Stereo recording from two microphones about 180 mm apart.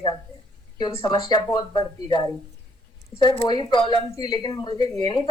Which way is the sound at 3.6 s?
25° left (ahead or behind).